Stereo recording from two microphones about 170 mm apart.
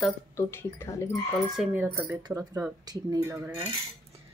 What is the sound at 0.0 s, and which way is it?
Speech, 15° left (ahead or behind).